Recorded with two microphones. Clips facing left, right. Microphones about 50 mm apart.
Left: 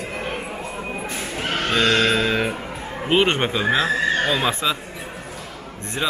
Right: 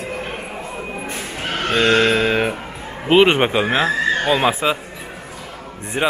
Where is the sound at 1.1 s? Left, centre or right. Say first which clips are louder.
Left 1 dB; centre.